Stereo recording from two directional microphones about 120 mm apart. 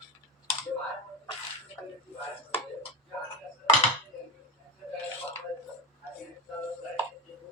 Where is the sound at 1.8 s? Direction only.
15° left (ahead or behind).